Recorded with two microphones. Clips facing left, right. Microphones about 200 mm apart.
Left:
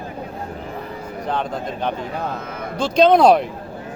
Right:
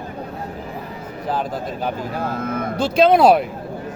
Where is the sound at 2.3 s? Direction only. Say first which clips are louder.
Right 6 dB; 50° right (ahead or behind).